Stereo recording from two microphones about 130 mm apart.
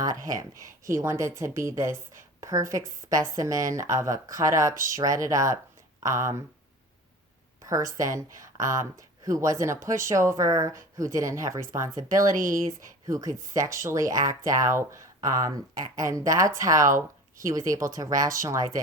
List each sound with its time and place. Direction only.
0.3 s speech: 25° right (ahead or behind)
7.6 s a sound: 25° right (ahead or behind)
8.1 s speech: 25° right (ahead or behind)
12.3 s speech: 90° right
13.1 s speech: 25° right (ahead or behind)